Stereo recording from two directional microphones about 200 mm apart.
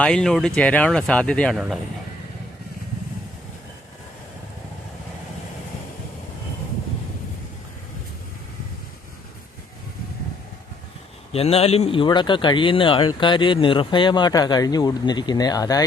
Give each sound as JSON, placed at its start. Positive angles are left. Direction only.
{"t": 0.0, "sound": "speech", "side_deg": 5}
{"t": 11.3, "sound": "speech", "side_deg": 30}